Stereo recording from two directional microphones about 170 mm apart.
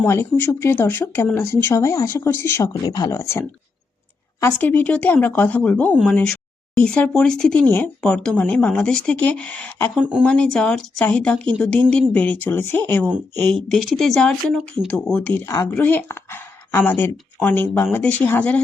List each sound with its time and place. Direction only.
0.0 s speech: 15° left (ahead or behind)
9.9 s speech: 5° right (ahead or behind)
10.2 s speech: 5° left (ahead or behind)